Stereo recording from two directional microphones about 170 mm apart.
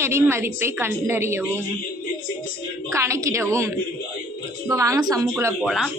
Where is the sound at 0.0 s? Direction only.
15° right (ahead or behind).